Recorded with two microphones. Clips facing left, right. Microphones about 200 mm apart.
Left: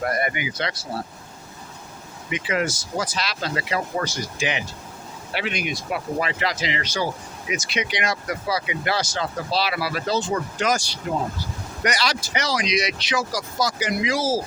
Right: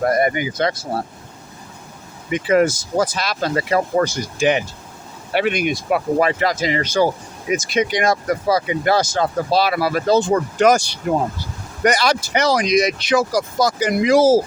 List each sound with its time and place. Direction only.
0.0 s speech: 40° right (ahead or behind)
2.3 s speech: 45° right (ahead or behind)